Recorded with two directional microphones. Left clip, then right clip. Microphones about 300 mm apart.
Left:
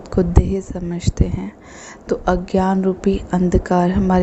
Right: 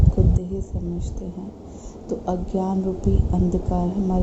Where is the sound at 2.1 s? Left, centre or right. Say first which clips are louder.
Left 8 dB; left.